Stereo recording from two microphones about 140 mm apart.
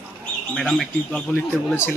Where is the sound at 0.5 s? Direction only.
5° left (ahead or behind).